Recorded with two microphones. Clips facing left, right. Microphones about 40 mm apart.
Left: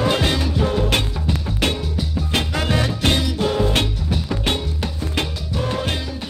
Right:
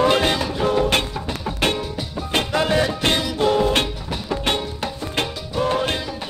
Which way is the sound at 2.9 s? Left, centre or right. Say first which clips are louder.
Even; centre.